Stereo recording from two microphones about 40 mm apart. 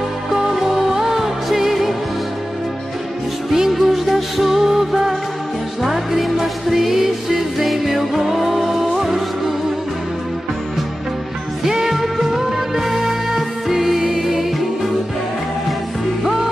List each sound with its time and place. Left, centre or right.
0.5 s music: centre
3.5 s music: centre
11.6 s music: centre